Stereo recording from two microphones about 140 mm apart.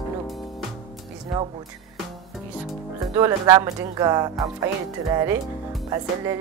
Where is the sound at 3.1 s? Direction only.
20° right (ahead or behind).